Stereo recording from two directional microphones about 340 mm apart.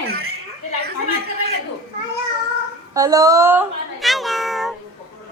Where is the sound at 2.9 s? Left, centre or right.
Centre.